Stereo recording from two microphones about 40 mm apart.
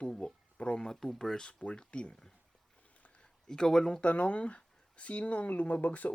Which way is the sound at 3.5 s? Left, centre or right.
Centre.